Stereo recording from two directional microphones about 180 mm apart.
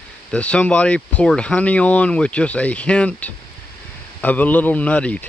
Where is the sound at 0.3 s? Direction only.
5° left (ahead or behind).